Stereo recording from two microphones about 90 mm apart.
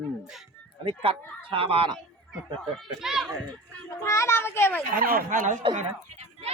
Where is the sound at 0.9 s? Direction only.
85° right.